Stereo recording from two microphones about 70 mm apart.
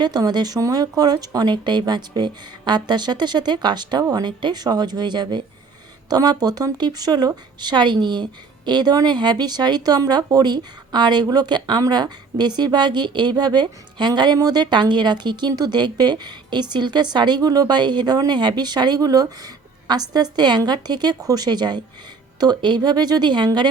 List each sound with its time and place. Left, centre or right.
0.0 s speech: right
6.1 s speech: right
14.3 s a woman's voice: right